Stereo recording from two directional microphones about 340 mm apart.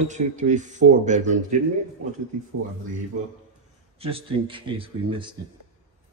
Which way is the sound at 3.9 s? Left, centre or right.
Centre.